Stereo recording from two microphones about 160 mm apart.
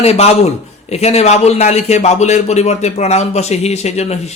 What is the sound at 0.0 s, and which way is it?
A man's voice, 40° left (ahead or behind).